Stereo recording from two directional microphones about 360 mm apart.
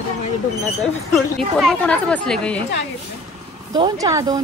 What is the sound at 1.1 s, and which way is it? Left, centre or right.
A woman's voice, centre.